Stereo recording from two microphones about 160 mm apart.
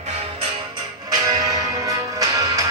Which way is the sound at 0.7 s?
25° right (ahead or behind).